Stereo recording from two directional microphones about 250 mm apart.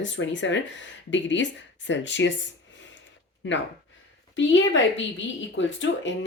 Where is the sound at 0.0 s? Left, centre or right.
Left.